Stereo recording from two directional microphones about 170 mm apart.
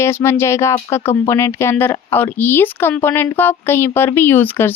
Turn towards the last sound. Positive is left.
turn(degrees=10)  # may be behind; listen again after turning